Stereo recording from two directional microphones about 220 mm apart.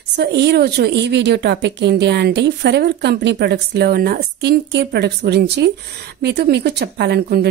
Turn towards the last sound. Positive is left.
turn(degrees=-50)  # may be behind; listen again after turning